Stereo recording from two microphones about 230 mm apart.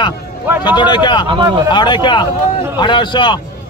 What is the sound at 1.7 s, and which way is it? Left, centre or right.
A man's voice, centre.